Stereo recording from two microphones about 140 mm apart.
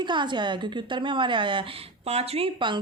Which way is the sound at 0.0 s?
35° right (ahead or behind).